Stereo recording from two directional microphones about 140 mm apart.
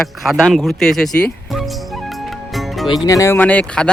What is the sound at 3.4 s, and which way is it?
Speech, 10° left (ahead or behind).